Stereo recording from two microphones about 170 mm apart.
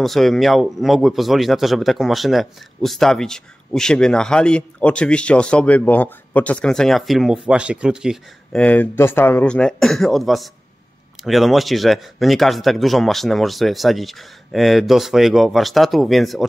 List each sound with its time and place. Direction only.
0.0 s speech: centre (ahead or behind)
8.6 s speech: 10° left (ahead or behind)